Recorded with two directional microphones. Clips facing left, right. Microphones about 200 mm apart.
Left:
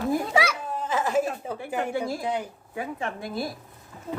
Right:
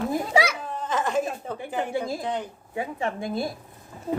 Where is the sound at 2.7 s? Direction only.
20° right (ahead or behind).